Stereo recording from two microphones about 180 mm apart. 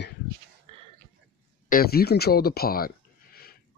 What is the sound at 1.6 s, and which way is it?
Speech, 55° left (ahead or behind).